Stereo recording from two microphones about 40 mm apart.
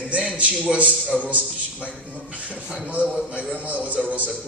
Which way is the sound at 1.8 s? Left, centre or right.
Right.